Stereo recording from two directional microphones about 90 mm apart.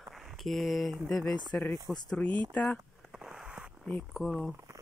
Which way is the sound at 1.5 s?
25° left (ahead or behind).